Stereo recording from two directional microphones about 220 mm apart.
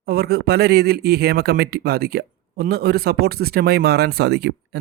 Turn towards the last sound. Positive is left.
turn(degrees=-50)  # may be behind; listen again after turning